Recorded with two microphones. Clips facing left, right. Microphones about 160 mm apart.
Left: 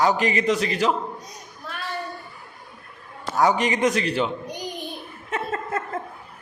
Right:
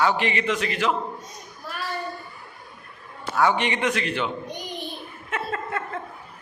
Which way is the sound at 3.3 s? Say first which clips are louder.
Left 2 dB; 40° left (ahead or behind).